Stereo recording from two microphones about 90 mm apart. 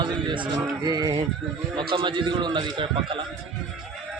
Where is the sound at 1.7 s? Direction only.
65° right (ahead or behind).